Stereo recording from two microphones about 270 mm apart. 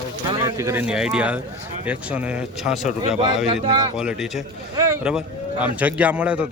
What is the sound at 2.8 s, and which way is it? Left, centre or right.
Speech, left.